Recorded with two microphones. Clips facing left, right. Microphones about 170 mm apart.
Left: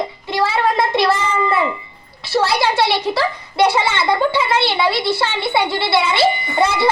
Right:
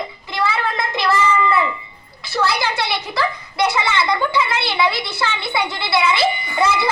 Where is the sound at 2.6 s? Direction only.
30° left (ahead or behind).